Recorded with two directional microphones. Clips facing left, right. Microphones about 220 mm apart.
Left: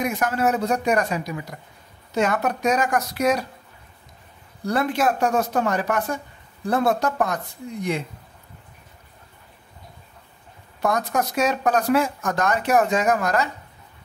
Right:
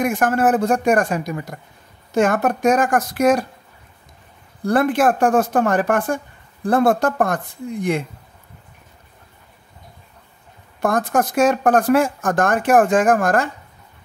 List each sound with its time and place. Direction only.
0.0 s speech: 50° right (ahead or behind)
4.6 s speech: 50° right (ahead or behind)
10.8 s speech: 50° right (ahead or behind)